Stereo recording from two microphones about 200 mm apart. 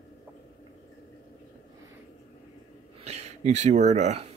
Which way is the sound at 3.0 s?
30° right (ahead or behind).